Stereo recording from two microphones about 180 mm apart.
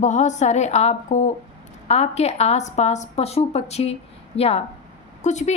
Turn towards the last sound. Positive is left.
turn(degrees=40)  # may be behind; listen again after turning